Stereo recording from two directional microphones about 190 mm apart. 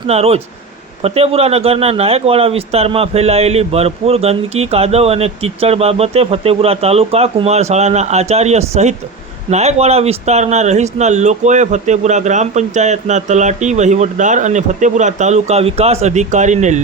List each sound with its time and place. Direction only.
0.1 s speech: 35° right (ahead or behind)